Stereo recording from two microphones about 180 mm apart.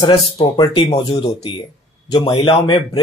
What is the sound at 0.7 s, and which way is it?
Speech, 30° left (ahead or behind).